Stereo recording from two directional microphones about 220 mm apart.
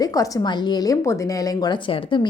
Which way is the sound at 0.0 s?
15° left (ahead or behind).